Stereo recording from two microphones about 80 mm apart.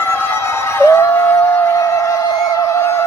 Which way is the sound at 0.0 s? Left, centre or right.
Left.